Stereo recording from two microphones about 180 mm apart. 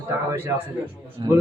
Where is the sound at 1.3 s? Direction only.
20° right (ahead or behind).